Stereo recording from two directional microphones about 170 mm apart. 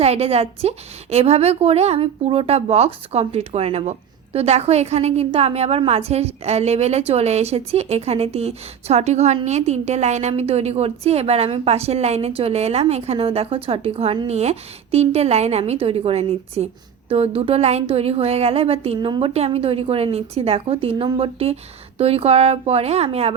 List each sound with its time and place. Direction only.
0.0 s a woman's voice: 35° right (ahead or behind)